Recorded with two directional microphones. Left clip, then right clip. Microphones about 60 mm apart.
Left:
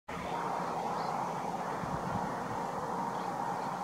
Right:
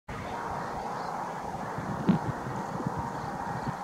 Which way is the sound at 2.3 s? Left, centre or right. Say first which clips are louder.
Right 1 dB; centre.